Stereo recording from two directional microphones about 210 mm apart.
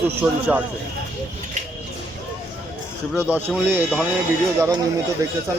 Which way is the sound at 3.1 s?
5° right (ahead or behind).